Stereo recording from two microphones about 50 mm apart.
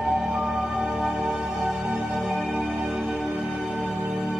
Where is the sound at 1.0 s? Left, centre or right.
Centre.